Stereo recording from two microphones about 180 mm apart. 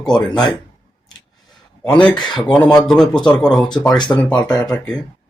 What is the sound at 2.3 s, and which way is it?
Speech, 25° left (ahead or behind).